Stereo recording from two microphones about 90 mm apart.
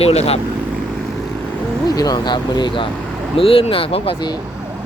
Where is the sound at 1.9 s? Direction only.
45° left (ahead or behind).